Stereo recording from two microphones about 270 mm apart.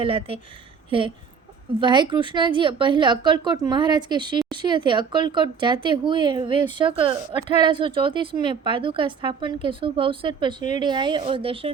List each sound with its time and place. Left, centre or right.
0.0 s a woman's voice: centre
7.3 s speech: left
7.6 s a woman's voice: centre